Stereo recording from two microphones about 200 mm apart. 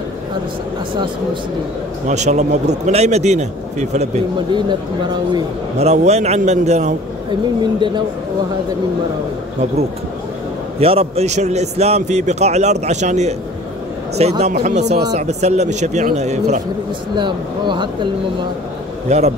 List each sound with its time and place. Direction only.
2.0 s a man's voice: 35° right (ahead or behind)
4.6 s speech: 20° right (ahead or behind)
5.8 s a man's voice: 35° right (ahead or behind)
10.8 s a man's voice: 30° right (ahead or behind)
17.1 s speech: 25° right (ahead or behind)
19.0 s a man's voice: 35° right (ahead or behind)